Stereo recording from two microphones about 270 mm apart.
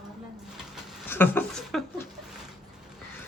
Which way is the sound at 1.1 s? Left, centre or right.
Centre.